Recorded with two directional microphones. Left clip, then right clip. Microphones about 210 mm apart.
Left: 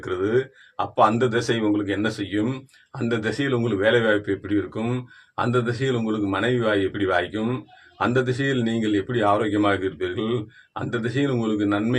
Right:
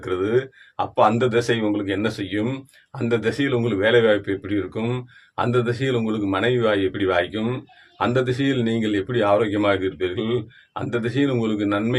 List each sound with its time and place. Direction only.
0.0 s speech: 20° right (ahead or behind)